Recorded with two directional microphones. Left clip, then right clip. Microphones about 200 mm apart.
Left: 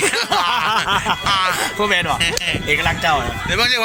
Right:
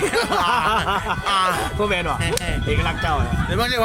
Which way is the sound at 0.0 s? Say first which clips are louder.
Left 2 dB; 10° right (ahead or behind).